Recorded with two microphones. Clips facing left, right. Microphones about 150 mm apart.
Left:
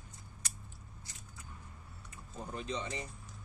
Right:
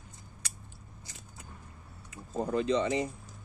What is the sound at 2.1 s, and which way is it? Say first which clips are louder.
Speech: right 13 dB; 90° right.